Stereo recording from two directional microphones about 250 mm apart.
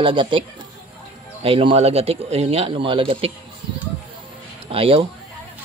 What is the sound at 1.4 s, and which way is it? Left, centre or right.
Speech, right.